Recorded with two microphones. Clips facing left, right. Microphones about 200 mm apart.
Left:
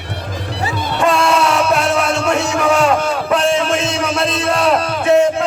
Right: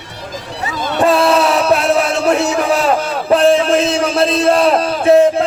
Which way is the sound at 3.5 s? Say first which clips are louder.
Right 4 dB; 35° right (ahead or behind).